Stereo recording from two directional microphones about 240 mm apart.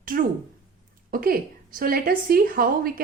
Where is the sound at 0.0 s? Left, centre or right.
Right.